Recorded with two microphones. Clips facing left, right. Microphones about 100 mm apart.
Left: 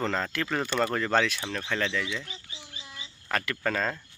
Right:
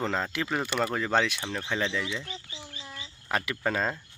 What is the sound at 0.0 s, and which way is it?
Speech, 15° right (ahead or behind).